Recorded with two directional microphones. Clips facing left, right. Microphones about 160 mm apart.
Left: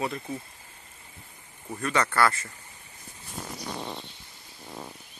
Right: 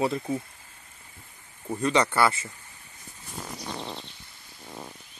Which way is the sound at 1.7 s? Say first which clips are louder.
Right 3 dB; 20° right (ahead or behind).